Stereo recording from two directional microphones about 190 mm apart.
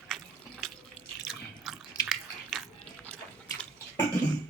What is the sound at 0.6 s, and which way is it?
Drip, centre (ahead or behind).